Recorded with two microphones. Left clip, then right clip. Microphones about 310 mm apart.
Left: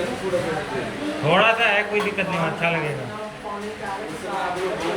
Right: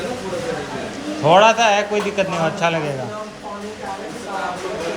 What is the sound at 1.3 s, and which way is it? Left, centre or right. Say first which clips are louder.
A man's voice: right 5 dB; centre.